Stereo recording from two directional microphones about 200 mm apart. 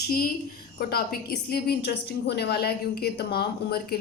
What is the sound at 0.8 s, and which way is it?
A woman's voice, 50° left (ahead or behind).